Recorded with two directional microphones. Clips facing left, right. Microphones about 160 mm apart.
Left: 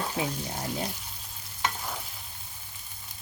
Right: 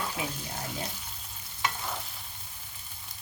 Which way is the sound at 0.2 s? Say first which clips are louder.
Left 7 dB; 35° left (ahead or behind).